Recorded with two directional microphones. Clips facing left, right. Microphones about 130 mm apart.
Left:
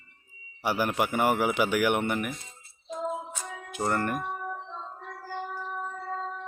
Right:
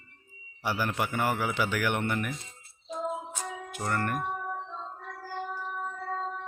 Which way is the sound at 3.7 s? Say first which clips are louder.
Left 3 dB; 20° left (ahead or behind).